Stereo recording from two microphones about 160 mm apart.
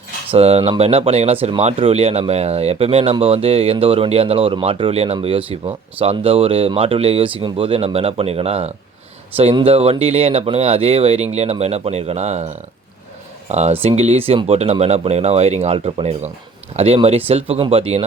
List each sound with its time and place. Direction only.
0.3 s speech: 40° right (ahead or behind)
13.5 s speech: 45° right (ahead or behind)